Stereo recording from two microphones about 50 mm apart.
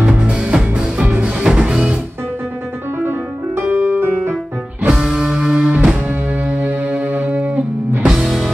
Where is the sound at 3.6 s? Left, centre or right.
Right.